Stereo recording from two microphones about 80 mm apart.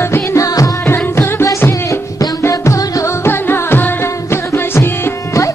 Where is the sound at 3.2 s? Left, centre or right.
Left.